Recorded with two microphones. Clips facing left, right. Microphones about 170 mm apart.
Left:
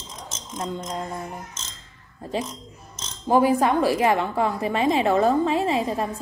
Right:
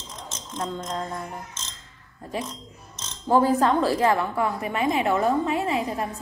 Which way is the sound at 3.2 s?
15° left (ahead or behind).